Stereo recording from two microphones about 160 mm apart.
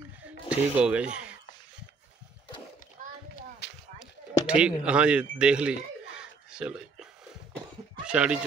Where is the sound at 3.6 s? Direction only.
90° left.